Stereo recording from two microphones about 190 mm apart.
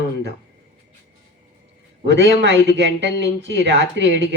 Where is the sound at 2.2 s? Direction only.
75° right (ahead or behind).